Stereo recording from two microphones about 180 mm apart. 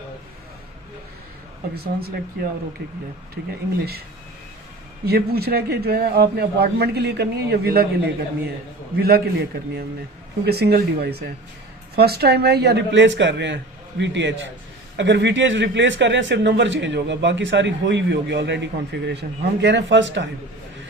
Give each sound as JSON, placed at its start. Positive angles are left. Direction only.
{"t": 1.7, "sound": "a man's voice", "side_deg": -60}
{"t": 5.0, "sound": "a man's voice", "side_deg": -60}